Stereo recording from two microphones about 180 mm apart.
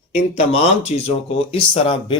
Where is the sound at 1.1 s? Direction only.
30° left (ahead or behind).